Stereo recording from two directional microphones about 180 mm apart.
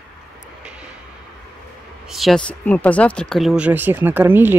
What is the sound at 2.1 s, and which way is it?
Speech, centre (ahead or behind).